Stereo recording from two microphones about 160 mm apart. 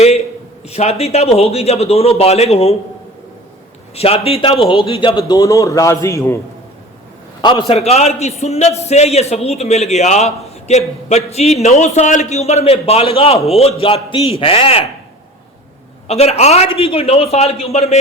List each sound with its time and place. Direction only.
0.7 s a man's voice: 40° left (ahead or behind)
3.9 s a man's voice: 35° left (ahead or behind); by 6.4 s 15° left (ahead or behind)
7.7 s a man's voice: 40° left (ahead or behind)
16.0 s a man's voice: 40° left (ahead or behind)